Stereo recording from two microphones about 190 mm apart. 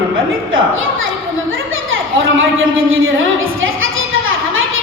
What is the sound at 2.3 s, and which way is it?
Speech, 90° right.